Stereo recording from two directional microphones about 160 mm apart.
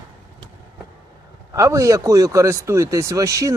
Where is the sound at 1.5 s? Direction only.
20° right (ahead or behind).